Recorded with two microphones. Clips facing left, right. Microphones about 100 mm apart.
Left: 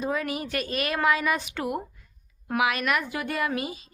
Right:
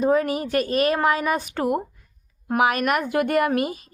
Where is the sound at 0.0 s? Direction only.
40° right (ahead or behind).